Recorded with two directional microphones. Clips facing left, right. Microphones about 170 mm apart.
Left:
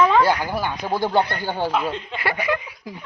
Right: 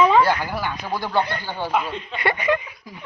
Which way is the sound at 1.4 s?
45° left (ahead or behind).